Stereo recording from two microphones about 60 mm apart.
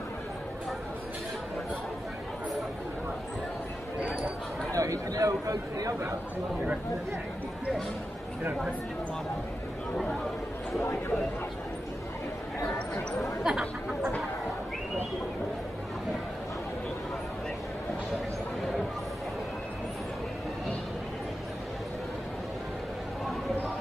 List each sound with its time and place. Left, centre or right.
4.7 s chatter: right
10.8 s speech: left
13.4 s chatter: centre